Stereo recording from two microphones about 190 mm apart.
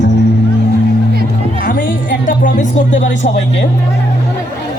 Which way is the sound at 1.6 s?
45° left (ahead or behind).